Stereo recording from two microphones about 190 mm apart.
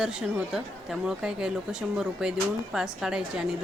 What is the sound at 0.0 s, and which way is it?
A woman's voice, 5° right (ahead or behind).